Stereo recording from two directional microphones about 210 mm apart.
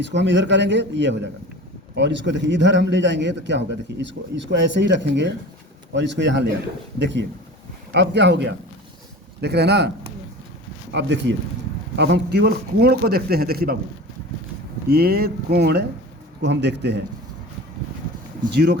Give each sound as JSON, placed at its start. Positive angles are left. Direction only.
{"t": 0.0, "sound": "a man's voice", "side_deg": -55}
{"t": 7.9, "sound": "a man's voice", "side_deg": -55}
{"t": 10.9, "sound": "a man's voice", "side_deg": -60}
{"t": 14.8, "sound": "a man's voice", "side_deg": -50}
{"t": 18.5, "sound": "a man's voice", "side_deg": -50}